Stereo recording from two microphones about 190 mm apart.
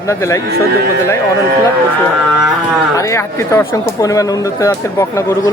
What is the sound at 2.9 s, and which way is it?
Speech, 15° left (ahead or behind).